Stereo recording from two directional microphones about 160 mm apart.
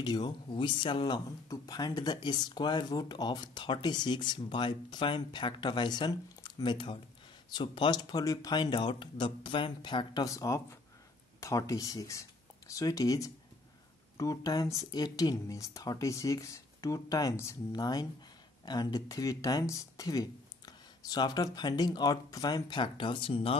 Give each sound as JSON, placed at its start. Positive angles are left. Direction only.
{"t": 0.0, "sound": "speech", "side_deg": 25}